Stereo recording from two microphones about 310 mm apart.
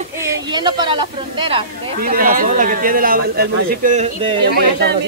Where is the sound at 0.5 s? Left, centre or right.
Centre.